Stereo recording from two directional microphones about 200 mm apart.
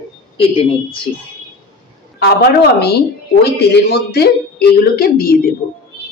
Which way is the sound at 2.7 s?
55° left (ahead or behind).